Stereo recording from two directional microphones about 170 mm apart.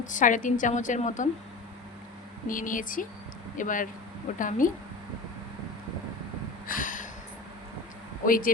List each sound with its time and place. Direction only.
0.0 s a woman's voice: 50° left (ahead or behind)
2.5 s a woman's voice: 50° left (ahead or behind)
6.7 s a sound: 50° left (ahead or behind)
8.2 s speech: 55° left (ahead or behind)